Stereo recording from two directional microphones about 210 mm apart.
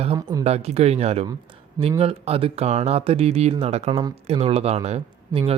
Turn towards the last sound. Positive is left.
turn(degrees=-30)  # may be behind; listen again after turning